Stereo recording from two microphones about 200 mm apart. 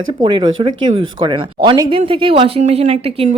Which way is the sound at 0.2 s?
25° right (ahead or behind).